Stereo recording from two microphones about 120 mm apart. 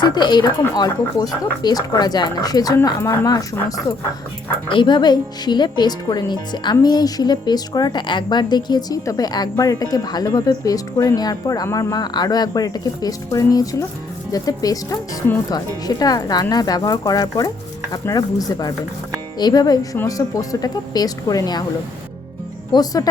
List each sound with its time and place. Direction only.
0.0 s speech: 40° left (ahead or behind)
4.7 s speech: 40° left (ahead or behind)
22.7 s speech: 30° left (ahead or behind)